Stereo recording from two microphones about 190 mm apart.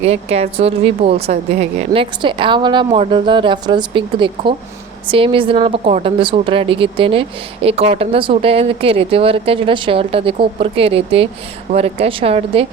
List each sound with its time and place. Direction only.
0.0 s a woman's voice: 35° right (ahead or behind)